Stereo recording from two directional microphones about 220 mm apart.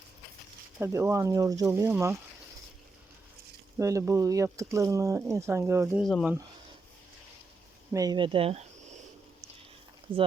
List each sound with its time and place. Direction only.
0.8 s speech: 15° right (ahead or behind)
3.8 s speech: 15° right (ahead or behind)
6.0 s speech: centre (ahead or behind)
7.9 s speech: 20° right (ahead or behind)
10.1 s speech: 25° right (ahead or behind)